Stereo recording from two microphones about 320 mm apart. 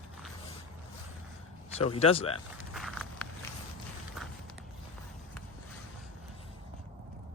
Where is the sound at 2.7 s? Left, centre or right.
Centre.